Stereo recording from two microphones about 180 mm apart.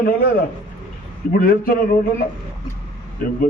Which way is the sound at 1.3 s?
50° left (ahead or behind).